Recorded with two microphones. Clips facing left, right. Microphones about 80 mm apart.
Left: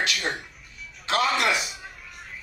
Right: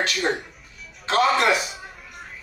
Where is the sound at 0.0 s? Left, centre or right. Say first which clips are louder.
Right 4 dB; right.